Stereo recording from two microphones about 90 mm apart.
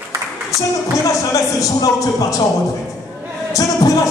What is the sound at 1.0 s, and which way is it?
Music, 40° left (ahead or behind).